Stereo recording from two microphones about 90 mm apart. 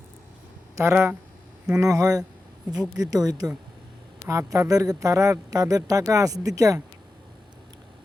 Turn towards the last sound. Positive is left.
turn(degrees=-40)  # may be behind; listen again after turning